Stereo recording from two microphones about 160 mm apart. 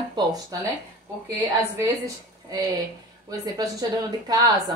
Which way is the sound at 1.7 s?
20° right (ahead or behind).